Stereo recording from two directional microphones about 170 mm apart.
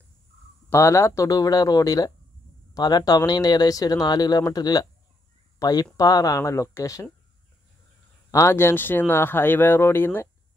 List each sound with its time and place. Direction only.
0.7 s speech: 15° left (ahead or behind)
8.3 s speech: 15° left (ahead or behind)